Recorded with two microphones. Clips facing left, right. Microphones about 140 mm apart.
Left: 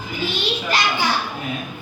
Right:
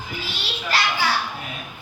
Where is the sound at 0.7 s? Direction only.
15° left (ahead or behind).